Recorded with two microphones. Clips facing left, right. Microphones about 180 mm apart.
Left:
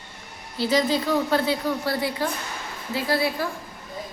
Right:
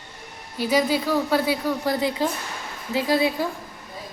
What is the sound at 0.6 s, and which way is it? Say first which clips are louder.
Speech: right 1 dB; 10° right (ahead or behind).